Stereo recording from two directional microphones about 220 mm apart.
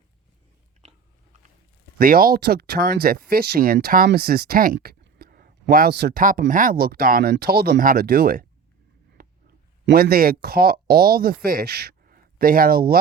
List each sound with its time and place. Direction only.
2.0 s speech: 40° right (ahead or behind)
9.8 s speech: 45° right (ahead or behind)